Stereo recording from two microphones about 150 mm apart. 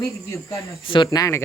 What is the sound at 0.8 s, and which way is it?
Speech, 35° left (ahead or behind).